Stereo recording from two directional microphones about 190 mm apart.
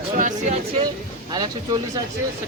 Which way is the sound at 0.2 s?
40° right (ahead or behind).